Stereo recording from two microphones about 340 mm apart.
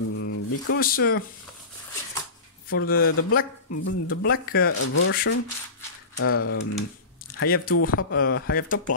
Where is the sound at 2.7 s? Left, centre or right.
Left.